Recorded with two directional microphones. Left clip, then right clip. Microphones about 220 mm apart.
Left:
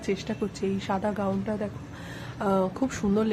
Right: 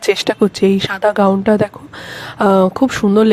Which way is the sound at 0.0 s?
45° right (ahead or behind).